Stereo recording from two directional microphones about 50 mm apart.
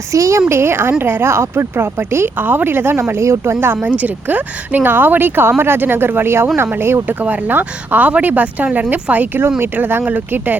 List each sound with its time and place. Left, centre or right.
0.1 s a woman's voice: right
2.4 s speech: right
3.1 s a woman's voice: right
3.8 s speech: right